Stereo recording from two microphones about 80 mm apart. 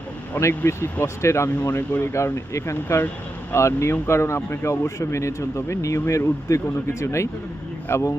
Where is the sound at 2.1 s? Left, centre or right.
Left.